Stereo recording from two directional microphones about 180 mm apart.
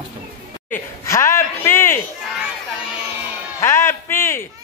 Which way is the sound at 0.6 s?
15° left (ahead or behind).